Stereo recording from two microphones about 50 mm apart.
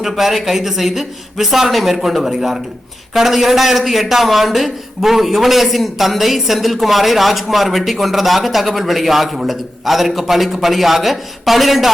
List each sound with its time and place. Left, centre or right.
0.0 s a man's voice: centre